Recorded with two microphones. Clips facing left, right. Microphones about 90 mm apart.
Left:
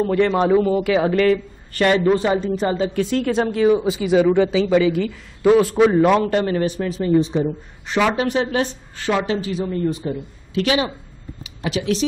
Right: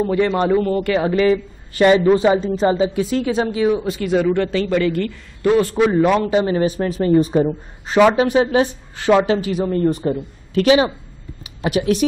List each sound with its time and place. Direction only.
0.0 s speech: 5° right (ahead or behind)
1.2 s speech: 15° right (ahead or behind)
2.4 s speech: 30° right (ahead or behind)
2.7 s speech: 10° right (ahead or behind)
6.6 s speech: 40° right (ahead or behind)
7.1 s speech: 50° right (ahead or behind)
8.4 s a woman's voice: 25° right (ahead or behind)
9.7 s speech: 55° right (ahead or behind)
11.7 s speech: 50° right (ahead or behind)